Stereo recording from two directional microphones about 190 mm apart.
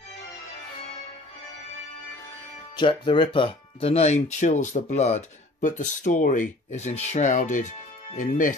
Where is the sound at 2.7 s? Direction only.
25° left (ahead or behind); by 8.5 s 45° left (ahead or behind).